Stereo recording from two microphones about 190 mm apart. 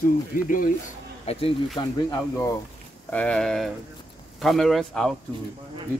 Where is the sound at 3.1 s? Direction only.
5° left (ahead or behind).